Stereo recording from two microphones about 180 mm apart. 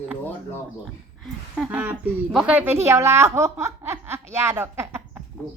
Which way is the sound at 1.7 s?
10° right (ahead or behind).